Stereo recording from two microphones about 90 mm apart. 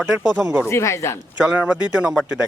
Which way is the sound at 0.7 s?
30° left (ahead or behind).